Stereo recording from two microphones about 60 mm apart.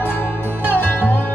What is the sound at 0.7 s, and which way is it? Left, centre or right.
Music, left.